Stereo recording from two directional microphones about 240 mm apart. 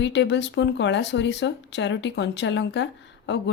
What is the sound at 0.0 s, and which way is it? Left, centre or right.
Speech, left.